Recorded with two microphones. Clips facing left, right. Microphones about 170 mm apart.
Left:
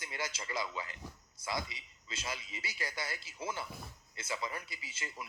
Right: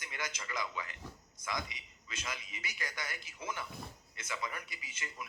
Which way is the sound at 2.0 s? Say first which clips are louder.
Left 2 dB; 30° left (ahead or behind).